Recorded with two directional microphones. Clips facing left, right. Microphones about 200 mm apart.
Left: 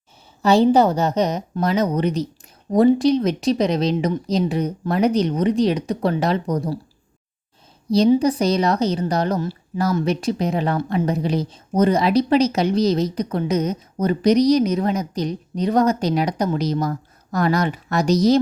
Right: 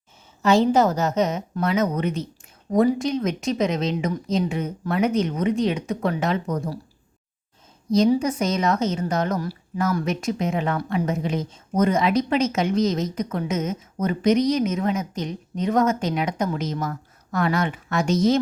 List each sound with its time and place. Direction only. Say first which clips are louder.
0.4 s a woman's voice: left 3 dB; 35° left (ahead or behind)
7.9 s a woman's voice: left 3 dB; 35° left (ahead or behind)